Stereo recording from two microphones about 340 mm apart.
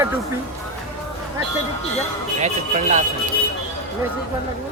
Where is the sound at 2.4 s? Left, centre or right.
Right.